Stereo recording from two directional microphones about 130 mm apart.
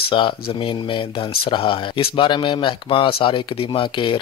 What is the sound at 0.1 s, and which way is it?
Speech, 40° left (ahead or behind).